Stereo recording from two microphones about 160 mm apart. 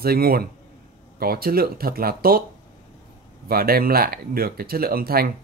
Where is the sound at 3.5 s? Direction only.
70° right (ahead or behind).